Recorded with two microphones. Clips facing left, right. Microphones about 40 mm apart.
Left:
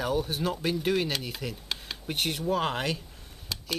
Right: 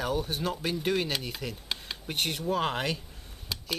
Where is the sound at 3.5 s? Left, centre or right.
Centre.